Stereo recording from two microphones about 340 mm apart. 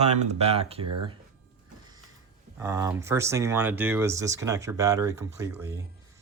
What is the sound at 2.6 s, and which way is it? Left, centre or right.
Speech, centre.